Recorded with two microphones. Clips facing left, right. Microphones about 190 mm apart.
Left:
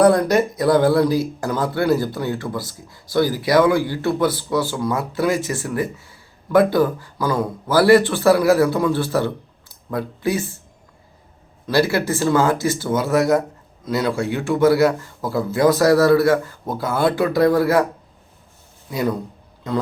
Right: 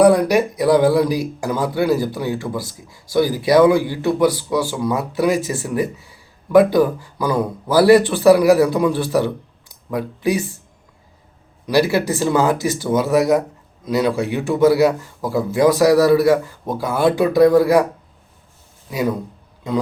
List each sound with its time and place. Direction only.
0.0 s speech: 10° right (ahead or behind)
11.6 s speech: 15° right (ahead or behind)
18.9 s speech: 10° right (ahead or behind)